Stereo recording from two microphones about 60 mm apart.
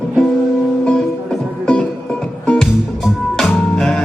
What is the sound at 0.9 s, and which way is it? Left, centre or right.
Music, centre.